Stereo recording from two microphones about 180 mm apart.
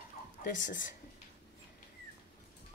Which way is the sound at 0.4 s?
45° left (ahead or behind).